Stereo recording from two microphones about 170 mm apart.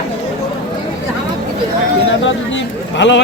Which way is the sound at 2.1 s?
90° left.